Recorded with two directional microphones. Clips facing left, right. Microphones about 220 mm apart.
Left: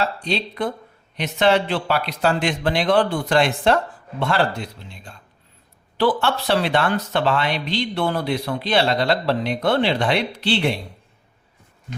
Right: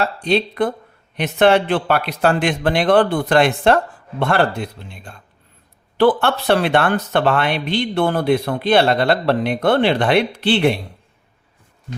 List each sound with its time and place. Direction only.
0.0 s speech: 55° right (ahead or behind)